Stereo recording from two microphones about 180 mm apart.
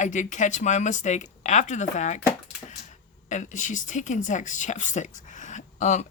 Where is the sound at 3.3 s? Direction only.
45° left (ahead or behind).